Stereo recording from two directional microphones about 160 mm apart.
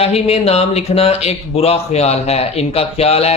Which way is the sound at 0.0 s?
40° left (ahead or behind).